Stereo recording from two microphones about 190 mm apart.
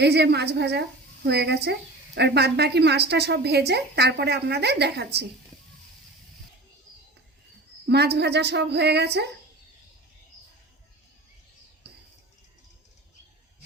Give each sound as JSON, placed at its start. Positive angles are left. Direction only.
{"t": 0.0, "sound": "a woman's voice", "side_deg": -60}
{"t": 7.9, "sound": "a woman's voice", "side_deg": -60}